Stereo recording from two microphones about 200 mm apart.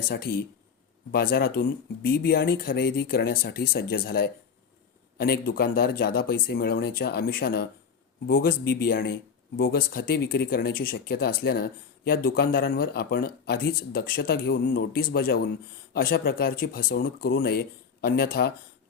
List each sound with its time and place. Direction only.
0.0 s speech: 50° left (ahead or behind)